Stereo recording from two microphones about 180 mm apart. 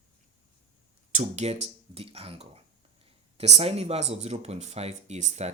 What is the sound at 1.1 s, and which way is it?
Speech, 40° right (ahead or behind).